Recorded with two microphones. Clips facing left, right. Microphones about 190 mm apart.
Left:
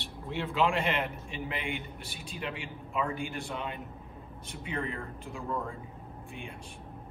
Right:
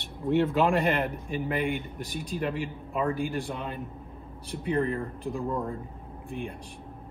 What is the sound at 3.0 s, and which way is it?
A man's voice, 35° right (ahead or behind).